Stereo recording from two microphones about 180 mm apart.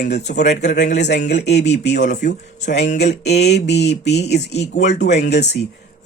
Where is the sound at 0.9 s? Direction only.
70° left (ahead or behind).